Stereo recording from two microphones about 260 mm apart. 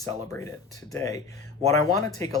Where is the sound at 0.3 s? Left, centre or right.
Centre.